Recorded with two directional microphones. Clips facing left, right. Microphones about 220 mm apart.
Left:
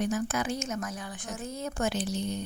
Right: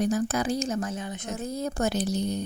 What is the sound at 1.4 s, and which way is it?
A woman's voice, 35° right (ahead or behind).